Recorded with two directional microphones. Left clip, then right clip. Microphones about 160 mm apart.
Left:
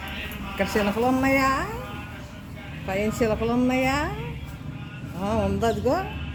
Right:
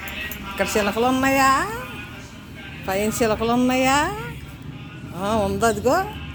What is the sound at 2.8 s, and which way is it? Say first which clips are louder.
Speech: right 3 dB; 25° right (ahead or behind).